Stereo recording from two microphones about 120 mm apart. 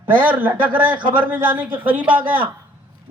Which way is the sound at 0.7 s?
45° right (ahead or behind).